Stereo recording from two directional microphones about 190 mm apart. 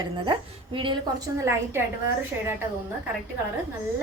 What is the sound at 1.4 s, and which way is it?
Speech, 15° right (ahead or behind).